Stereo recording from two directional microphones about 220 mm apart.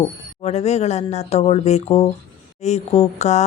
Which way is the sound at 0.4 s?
30° left (ahead or behind).